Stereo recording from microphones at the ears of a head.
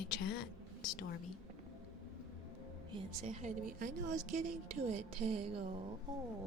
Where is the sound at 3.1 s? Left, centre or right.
Right.